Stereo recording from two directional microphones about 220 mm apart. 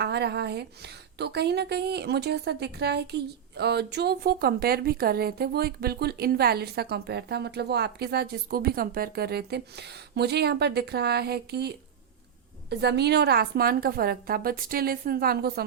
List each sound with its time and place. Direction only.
0.0 s speech: 50° right (ahead or behind)
12.8 s speech: 50° right (ahead or behind)